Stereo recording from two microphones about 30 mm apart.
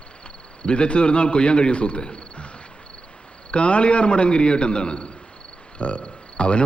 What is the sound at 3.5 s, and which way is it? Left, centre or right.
A man's voice, left.